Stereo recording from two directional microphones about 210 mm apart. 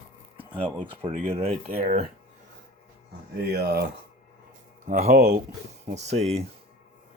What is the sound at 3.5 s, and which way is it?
Speech, 50° right (ahead or behind).